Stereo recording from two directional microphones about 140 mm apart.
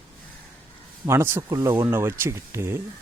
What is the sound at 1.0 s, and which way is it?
A man's voice, 20° right (ahead or behind).